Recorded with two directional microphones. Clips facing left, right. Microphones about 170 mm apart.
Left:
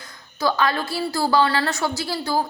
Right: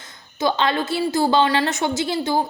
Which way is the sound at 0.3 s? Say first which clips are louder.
Right 1 dB; 20° right (ahead or behind).